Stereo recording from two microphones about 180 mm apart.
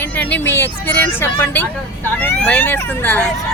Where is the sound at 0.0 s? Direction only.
10° left (ahead or behind).